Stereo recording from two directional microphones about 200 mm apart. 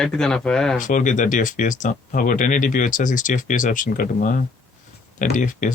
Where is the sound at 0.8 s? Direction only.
40° left (ahead or behind).